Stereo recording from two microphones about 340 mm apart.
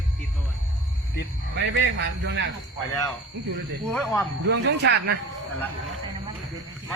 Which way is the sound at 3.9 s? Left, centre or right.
Centre.